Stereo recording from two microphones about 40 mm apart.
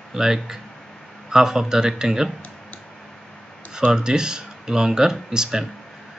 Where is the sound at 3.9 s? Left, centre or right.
Centre.